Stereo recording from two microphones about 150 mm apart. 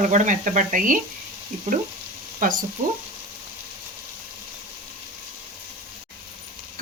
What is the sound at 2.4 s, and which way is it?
Speech, 65° right (ahead or behind).